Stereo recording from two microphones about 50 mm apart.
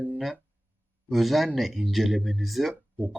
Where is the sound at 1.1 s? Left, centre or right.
Centre.